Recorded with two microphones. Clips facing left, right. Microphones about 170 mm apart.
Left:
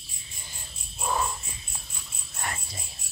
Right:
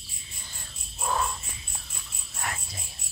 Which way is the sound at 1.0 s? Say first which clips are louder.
Even; 5° left (ahead or behind).